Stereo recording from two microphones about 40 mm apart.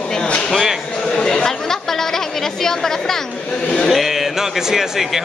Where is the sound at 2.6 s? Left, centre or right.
Centre.